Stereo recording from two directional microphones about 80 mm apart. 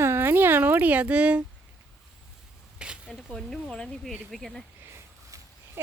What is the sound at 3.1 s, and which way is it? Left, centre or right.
Speech, centre.